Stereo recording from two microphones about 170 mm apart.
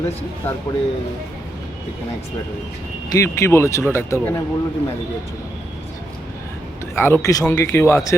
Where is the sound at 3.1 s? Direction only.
15° left (ahead or behind).